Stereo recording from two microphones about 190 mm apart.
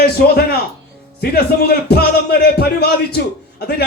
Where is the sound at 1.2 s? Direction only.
55° left (ahead or behind).